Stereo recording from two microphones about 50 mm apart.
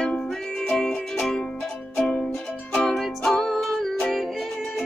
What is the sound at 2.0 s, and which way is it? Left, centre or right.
Music, centre.